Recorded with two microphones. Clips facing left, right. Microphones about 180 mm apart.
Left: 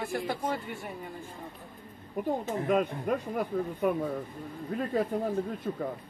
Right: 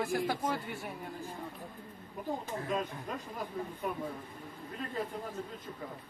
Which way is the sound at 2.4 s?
60° left (ahead or behind).